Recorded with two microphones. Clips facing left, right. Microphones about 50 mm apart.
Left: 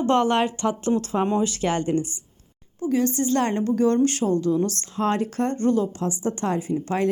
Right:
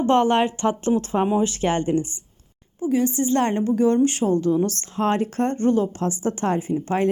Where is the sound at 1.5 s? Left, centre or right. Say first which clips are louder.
Right 2 dB; right.